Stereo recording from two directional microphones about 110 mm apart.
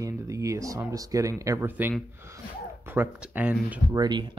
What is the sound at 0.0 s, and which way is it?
Speech, 30° right (ahead or behind).